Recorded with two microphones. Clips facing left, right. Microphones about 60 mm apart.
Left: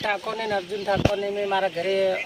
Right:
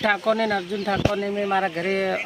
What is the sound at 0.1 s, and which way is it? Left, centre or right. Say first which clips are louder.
Speech: right 5 dB; right.